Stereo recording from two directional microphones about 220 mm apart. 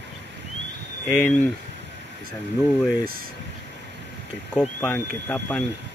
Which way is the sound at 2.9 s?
40° right (ahead or behind).